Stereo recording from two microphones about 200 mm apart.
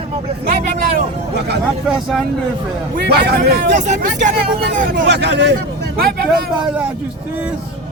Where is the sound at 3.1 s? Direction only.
55° right (ahead or behind).